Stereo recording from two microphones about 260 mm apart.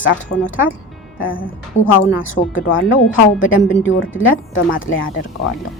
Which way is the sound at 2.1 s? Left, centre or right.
Left.